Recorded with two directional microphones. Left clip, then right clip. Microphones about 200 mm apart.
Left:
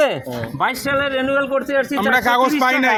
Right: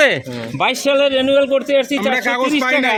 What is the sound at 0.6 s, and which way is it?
A man's voice, 40° right (ahead or behind).